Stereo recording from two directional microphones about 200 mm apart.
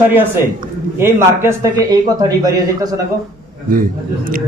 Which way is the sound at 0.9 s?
10° right (ahead or behind).